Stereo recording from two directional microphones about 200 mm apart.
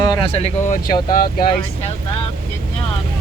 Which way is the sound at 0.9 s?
20° left (ahead or behind).